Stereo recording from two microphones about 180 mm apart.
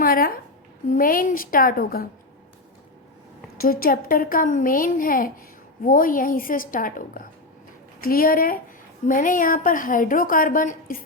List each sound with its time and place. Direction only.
0.0 s a woman's voice: 55° left (ahead or behind)
3.6 s a woman's voice: 55° left (ahead or behind)